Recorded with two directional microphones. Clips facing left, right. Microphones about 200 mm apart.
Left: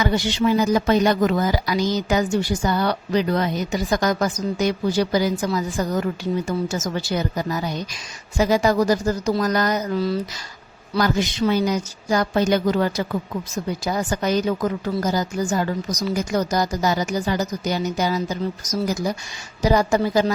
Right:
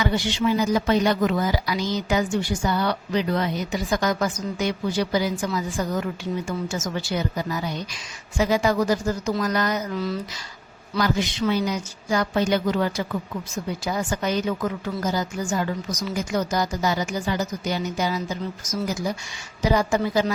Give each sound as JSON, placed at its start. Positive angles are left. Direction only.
{"t": 0.0, "sound": "speech", "side_deg": 40}